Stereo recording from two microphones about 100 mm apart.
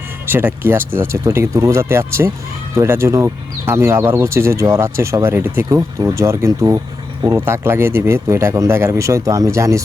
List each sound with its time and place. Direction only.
0.3 s speech: 20° right (ahead or behind)
5.6 s speech: 35° right (ahead or behind)